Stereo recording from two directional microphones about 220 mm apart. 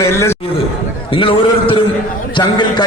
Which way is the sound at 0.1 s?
10° left (ahead or behind).